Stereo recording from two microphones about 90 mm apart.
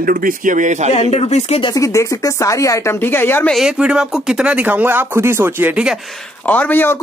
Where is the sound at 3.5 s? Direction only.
10° right (ahead or behind); by 5.8 s 25° right (ahead or behind).